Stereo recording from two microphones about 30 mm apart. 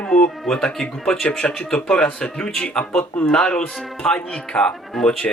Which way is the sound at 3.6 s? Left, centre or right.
Left.